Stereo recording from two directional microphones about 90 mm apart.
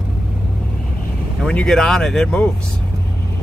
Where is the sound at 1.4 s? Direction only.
5° left (ahead or behind).